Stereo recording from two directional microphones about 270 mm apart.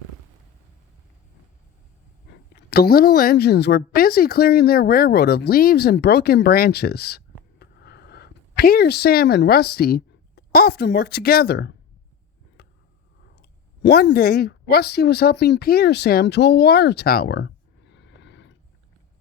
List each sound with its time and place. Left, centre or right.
2.6 s a woman's voice: left
12.6 s vehicle: left
13.8 s speech: left